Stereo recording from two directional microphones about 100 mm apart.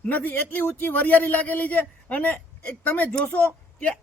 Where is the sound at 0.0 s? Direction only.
15° left (ahead or behind).